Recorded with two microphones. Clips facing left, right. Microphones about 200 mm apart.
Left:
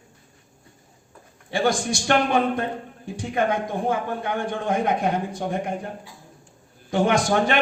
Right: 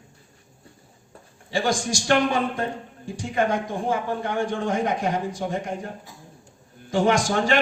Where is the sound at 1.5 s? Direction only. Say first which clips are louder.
Left 2 dB; 60° left (ahead or behind).